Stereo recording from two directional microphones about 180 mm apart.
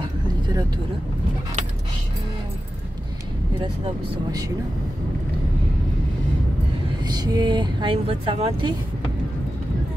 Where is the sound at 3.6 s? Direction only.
25° right (ahead or behind).